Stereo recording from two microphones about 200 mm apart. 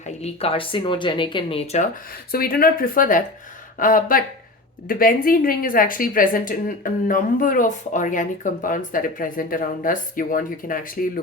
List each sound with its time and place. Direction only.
0.0 s speech: 30° left (ahead or behind)
2.3 s a woman's voice: 45° left (ahead or behind)